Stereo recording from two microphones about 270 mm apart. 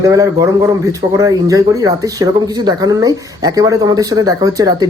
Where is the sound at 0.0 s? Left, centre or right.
Centre.